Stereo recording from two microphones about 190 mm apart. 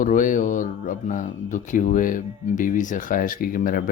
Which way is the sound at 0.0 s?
45° left (ahead or behind).